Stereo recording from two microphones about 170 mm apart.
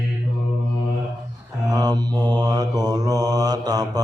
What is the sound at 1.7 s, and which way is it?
Mantra, 25° right (ahead or behind).